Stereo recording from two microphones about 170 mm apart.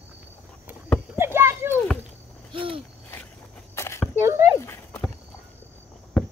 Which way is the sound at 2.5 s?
30° right (ahead or behind).